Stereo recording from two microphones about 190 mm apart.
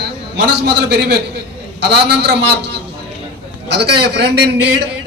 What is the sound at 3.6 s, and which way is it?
Speech, 60° right (ahead or behind).